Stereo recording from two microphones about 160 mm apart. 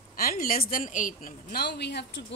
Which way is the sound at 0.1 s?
65° left (ahead or behind).